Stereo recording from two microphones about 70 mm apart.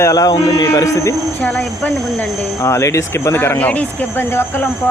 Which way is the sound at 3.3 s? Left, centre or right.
Left.